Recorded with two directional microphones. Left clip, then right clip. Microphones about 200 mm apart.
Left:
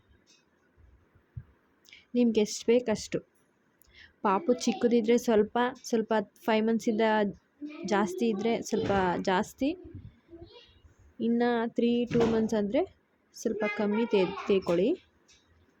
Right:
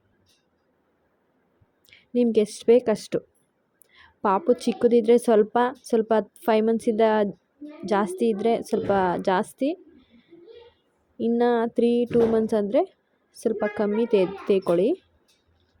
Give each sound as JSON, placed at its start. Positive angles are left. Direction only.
{"t": 1.9, "sound": "a woman's voice", "side_deg": -15}
{"t": 11.2, "sound": "a woman's voice", "side_deg": -15}